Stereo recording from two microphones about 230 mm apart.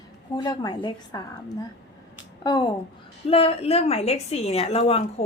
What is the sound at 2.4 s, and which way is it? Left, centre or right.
A woman's voice, centre.